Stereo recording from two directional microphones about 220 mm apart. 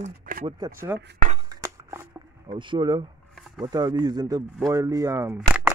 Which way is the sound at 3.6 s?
20° right (ahead or behind).